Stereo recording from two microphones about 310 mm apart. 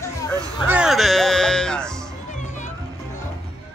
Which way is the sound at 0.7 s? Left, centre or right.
Centre.